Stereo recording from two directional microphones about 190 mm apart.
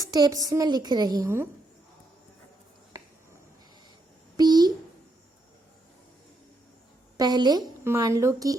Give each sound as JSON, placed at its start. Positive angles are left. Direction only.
{"t": 0.0, "sound": "a woman's voice", "side_deg": -20}
{"t": 4.4, "sound": "a sound", "side_deg": -20}
{"t": 7.2, "sound": "a woman's voice", "side_deg": -20}